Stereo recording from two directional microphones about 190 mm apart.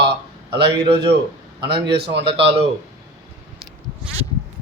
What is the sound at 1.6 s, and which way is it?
Speech, 25° right (ahead or behind).